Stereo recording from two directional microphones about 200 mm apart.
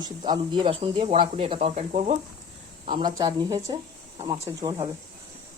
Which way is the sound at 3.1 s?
15° right (ahead or behind).